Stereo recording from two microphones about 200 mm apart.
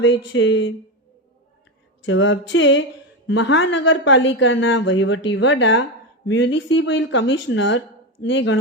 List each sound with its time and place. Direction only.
0.0 s speech: 65° left (ahead or behind)
2.0 s speech: 65° left (ahead or behind)